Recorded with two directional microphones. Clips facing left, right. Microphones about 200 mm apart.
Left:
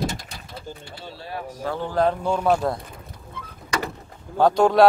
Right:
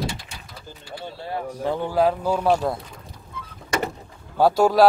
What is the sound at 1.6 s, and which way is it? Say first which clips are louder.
Speech: right 1 dB; 15° right (ahead or behind).